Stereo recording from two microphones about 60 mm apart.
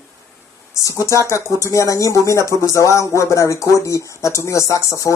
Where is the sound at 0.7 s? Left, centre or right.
Left.